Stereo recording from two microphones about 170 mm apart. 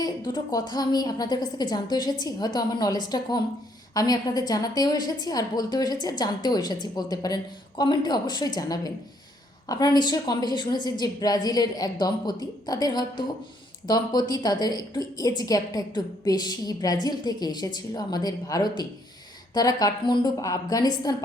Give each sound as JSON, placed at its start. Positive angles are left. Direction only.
{"t": 0.0, "sound": "a woman's voice", "side_deg": 25}